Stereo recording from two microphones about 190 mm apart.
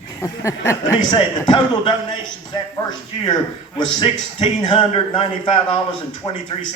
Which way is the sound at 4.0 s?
25° left (ahead or behind).